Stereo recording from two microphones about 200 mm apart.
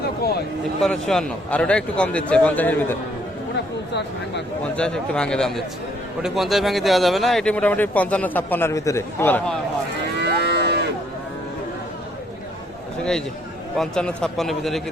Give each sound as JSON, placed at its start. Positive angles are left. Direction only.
{"t": 0.8, "sound": "a man's voice", "side_deg": 0}
{"t": 4.8, "sound": "a man's voice", "side_deg": 5}
{"t": 10.2, "sound": "moo", "side_deg": -55}
{"t": 13.7, "sound": "a man's voice", "side_deg": 5}